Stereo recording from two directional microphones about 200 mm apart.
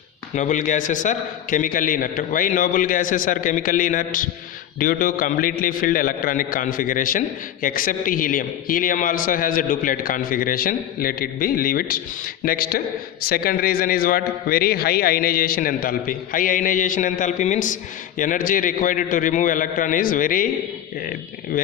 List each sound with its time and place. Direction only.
0.3 s a man's voice: 40° left (ahead or behind)